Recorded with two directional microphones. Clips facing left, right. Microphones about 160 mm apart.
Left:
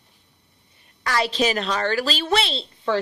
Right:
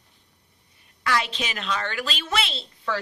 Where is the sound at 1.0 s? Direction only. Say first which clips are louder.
Left 5 dB; 40° left (ahead or behind).